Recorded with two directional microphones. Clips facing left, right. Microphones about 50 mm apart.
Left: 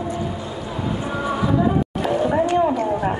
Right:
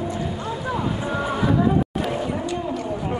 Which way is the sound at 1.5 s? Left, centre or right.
Centre.